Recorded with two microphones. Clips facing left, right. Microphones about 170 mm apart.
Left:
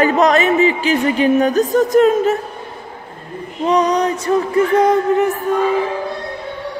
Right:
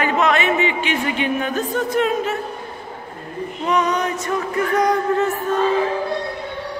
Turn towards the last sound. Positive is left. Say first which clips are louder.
# left 3 dB
turn(degrees=15)  # may be behind; listen again after turning